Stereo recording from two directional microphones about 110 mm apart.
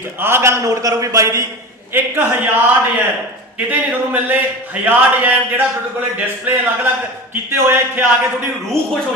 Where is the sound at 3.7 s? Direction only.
15° right (ahead or behind).